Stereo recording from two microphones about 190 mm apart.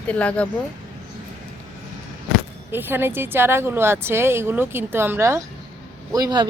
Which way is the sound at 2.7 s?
10° right (ahead or behind).